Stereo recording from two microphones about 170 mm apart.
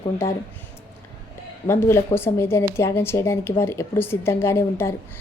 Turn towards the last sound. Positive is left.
turn(degrees=15)  # may be behind; listen again after turning